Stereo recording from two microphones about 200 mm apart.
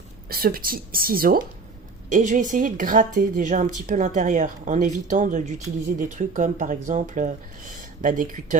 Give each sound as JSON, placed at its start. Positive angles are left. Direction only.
{"t": 0.3, "sound": "a woman's voice", "side_deg": -50}